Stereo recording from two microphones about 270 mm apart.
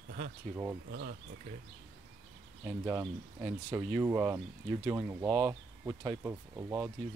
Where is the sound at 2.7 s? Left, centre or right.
Centre.